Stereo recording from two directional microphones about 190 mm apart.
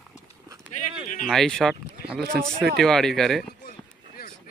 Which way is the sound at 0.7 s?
40° left (ahead or behind).